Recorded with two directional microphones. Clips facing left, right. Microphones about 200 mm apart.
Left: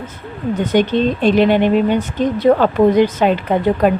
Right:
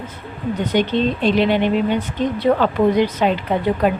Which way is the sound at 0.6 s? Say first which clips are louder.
Left 3 dB; 45° left (ahead or behind).